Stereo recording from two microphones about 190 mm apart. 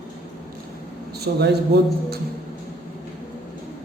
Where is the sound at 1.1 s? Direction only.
60° right (ahead or behind).